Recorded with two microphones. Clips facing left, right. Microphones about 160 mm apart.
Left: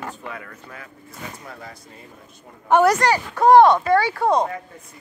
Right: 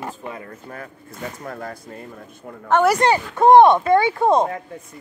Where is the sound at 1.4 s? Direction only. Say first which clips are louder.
Right 7 dB; 55° right (ahead or behind).